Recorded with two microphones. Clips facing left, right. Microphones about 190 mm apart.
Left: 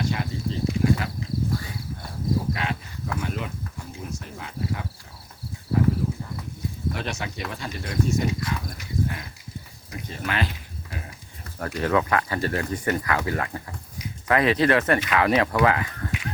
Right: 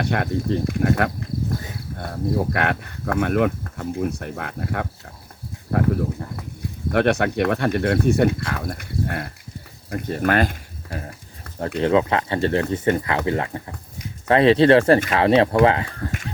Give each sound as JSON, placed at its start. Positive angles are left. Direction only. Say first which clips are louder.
{"t": 0.0, "sound": "speech", "louder": "right 5 dB", "side_deg": -60}
{"t": 11.8, "sound": "speech", "louder": "right 4 dB", "side_deg": -25}